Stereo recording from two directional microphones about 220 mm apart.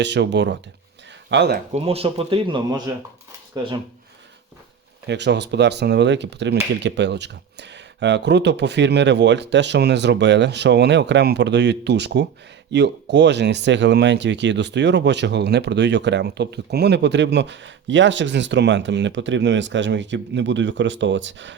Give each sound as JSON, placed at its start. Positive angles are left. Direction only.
{"t": 0.0, "sound": "speech", "side_deg": -50}
{"t": 1.7, "sound": "speech", "side_deg": -25}
{"t": 5.0, "sound": "speech", "side_deg": -50}